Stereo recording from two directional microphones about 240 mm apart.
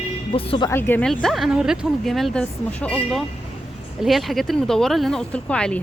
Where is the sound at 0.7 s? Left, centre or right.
Centre.